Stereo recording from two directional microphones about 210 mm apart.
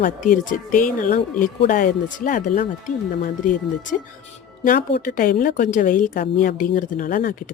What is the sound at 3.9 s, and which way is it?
A woman's voice, 40° left (ahead or behind).